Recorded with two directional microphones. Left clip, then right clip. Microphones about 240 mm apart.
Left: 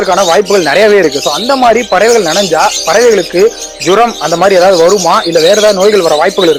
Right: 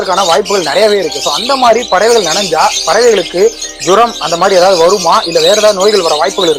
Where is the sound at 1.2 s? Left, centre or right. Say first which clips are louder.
Left 1 dB; left.